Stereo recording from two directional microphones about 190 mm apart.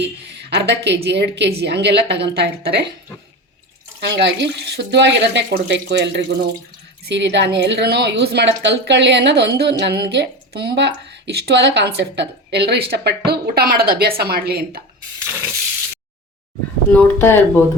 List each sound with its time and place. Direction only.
0.0 s a woman's voice: 65° right (ahead or behind)
4.0 s a woman's voice: 65° right (ahead or behind)
16.9 s speech: 10° left (ahead or behind)